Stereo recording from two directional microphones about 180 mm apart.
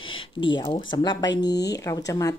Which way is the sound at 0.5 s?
25° left (ahead or behind).